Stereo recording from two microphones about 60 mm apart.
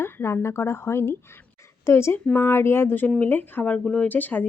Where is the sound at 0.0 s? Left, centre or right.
Left.